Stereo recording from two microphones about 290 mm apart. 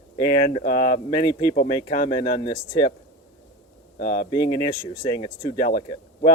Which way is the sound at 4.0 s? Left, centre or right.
Left.